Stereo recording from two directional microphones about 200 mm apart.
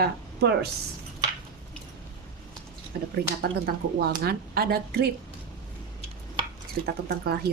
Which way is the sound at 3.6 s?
50° right (ahead or behind).